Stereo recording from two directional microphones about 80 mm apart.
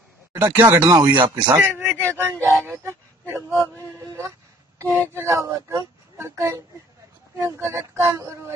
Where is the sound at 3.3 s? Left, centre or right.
Right.